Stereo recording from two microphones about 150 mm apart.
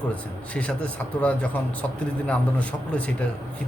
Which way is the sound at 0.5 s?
10° left (ahead or behind).